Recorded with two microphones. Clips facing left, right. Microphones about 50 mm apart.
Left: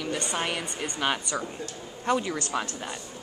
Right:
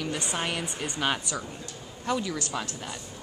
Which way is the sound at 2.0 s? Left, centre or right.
Left.